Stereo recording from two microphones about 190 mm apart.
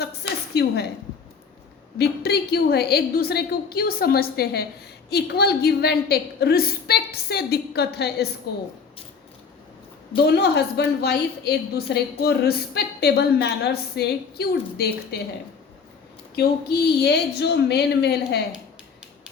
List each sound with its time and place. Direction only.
0.0 s a sound: 60° left (ahead or behind)
2.0 s a woman's voice: 55° left (ahead or behind)
10.2 s a woman's voice: 60° left (ahead or behind)
16.3 s a woman's voice: 55° left (ahead or behind)